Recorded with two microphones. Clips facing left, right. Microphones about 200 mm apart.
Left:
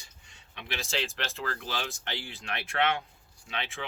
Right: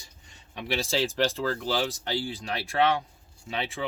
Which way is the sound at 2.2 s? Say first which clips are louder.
Right 6 dB; 35° right (ahead or behind).